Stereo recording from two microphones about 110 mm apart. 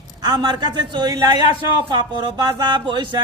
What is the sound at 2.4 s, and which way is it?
Speech, 45° right (ahead or behind).